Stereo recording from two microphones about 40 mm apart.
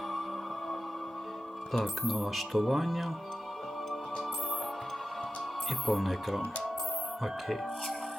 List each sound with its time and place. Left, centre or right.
1.7 s speech: centre
5.8 s speech: centre
7.4 s speech: centre